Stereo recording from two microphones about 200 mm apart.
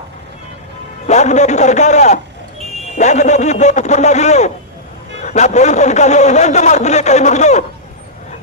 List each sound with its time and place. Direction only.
1.0 s a man's voice: 35° left (ahead or behind)